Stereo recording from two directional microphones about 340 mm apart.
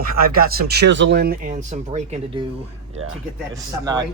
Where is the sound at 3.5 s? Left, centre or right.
Centre.